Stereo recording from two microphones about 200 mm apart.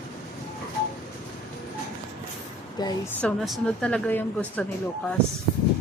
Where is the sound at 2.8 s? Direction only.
20° left (ahead or behind).